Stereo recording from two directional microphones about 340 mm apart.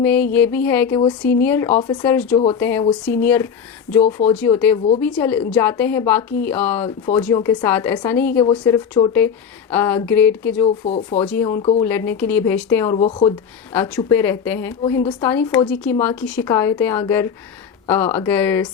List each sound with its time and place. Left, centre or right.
0.0 s a woman's voice: centre
10.8 s speech: centre
11.3 s a woman's voice: centre